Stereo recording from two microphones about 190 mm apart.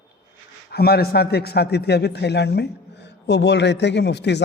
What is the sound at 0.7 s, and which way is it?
A man's voice, 55° left (ahead or behind).